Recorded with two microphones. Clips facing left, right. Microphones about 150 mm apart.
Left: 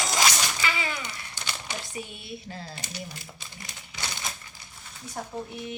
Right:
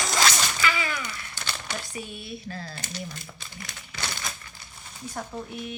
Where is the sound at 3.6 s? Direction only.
20° left (ahead or behind).